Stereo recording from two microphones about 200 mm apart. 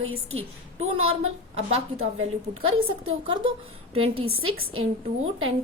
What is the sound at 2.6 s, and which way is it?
Speech, 90° right.